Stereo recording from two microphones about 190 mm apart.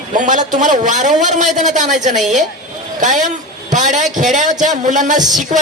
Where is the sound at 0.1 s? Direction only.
40° right (ahead or behind).